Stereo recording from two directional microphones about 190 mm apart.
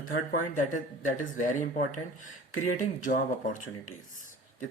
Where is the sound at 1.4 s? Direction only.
40° left (ahead or behind).